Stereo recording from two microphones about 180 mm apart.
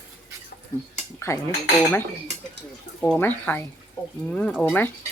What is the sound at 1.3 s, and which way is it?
Speech, 15° left (ahead or behind).